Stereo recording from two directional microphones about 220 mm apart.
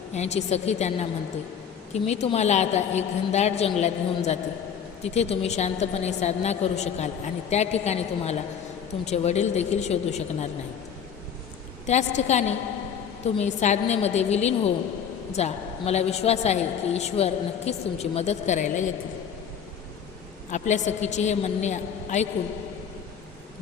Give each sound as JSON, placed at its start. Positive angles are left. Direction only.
{"t": 0.1, "sound": "a woman's voice", "side_deg": 30}
{"t": 11.9, "sound": "a woman's voice", "side_deg": 30}
{"t": 20.5, "sound": "a woman's voice", "side_deg": 30}